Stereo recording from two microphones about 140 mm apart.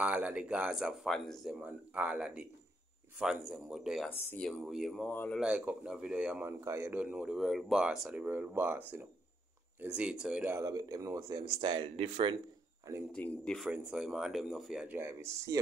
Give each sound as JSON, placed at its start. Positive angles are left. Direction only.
{"t": 0.0, "sound": "speech", "side_deg": -10}
{"t": 5.1, "sound": "speech", "side_deg": 10}
{"t": 5.4, "sound": "speech", "side_deg": -10}
{"t": 6.4, "sound": "speech", "side_deg": -20}
{"t": 10.5, "sound": "speech", "side_deg": -25}
{"t": 13.1, "sound": "speech", "side_deg": 5}
{"t": 13.7, "sound": "speech", "side_deg": -5}
{"t": 15.0, "sound": "speech", "side_deg": -20}